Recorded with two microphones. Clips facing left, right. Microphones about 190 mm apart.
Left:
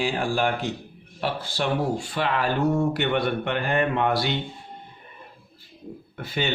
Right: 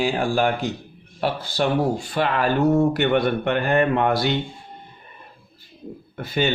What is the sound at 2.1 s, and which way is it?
Speech, 45° right (ahead or behind).